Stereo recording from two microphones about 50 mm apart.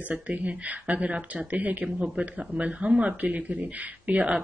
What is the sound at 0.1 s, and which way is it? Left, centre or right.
Speech, right.